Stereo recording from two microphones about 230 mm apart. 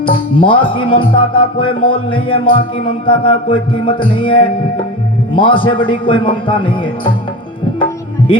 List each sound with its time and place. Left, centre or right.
0.0 s music: left
8.3 s music: left